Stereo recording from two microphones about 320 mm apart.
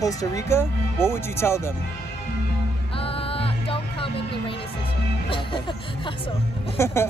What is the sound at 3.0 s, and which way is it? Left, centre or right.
Music, centre.